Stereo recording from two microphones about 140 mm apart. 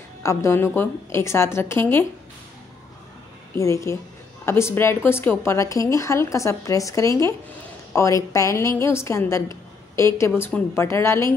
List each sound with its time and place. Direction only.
0.2 s a woman's voice: 20° left (ahead or behind)
3.5 s a woman's voice: 20° left (ahead or behind)